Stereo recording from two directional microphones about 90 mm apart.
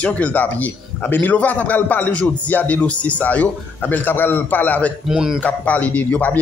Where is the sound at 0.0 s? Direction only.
15° left (ahead or behind).